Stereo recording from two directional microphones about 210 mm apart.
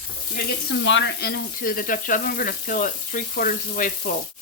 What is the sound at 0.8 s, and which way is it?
Speech, 60° left (ahead or behind).